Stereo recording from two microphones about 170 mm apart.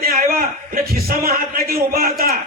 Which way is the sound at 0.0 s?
60° right (ahead or behind).